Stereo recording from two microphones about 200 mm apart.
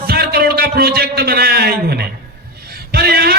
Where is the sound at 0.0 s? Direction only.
50° right (ahead or behind).